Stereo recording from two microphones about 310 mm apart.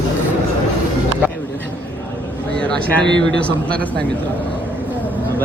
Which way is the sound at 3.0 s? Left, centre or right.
Right.